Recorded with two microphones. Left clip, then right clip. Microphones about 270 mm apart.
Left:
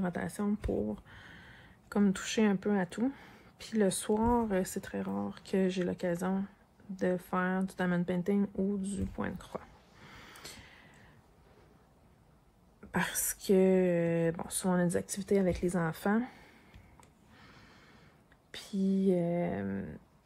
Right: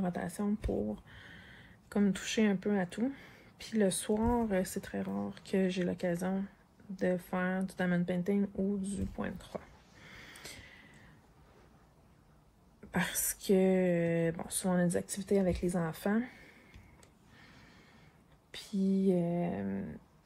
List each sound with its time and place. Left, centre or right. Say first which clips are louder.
0.0 s speech: left 1 dB; left
0.7 s speech: left 2 dB; left
1.0 s speech: even; centre
10.0 s a sound: even; centre
12.9 s speech: left 1 dB; centre
18.5 s a sound: even; left
19.3 s speech: left 2 dB; left